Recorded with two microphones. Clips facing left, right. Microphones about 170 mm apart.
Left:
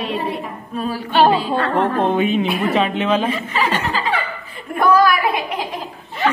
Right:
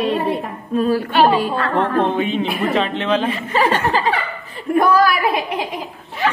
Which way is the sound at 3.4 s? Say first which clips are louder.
Right 3 dB; 50° right (ahead or behind).